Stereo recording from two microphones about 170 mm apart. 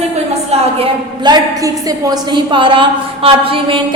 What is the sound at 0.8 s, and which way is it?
A woman's voice, 25° right (ahead or behind).